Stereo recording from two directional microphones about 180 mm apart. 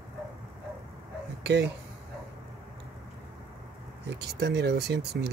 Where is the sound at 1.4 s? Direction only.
70° right (ahead or behind).